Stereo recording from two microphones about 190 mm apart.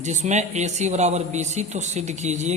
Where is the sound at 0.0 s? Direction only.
40° right (ahead or behind).